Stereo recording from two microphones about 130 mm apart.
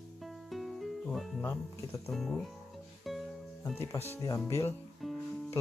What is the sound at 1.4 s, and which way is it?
Speech, 15° left (ahead or behind).